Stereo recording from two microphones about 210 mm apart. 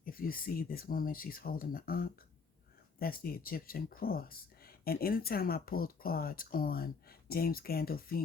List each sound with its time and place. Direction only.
0.0 s speech: 45° left (ahead or behind)